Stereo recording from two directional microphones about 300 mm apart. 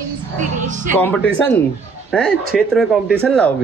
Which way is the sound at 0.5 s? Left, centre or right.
Right.